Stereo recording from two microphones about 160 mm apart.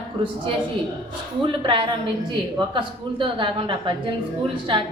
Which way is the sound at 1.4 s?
30° right (ahead or behind).